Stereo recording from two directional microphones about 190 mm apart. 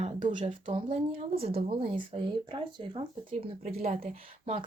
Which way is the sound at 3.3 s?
35° right (ahead or behind).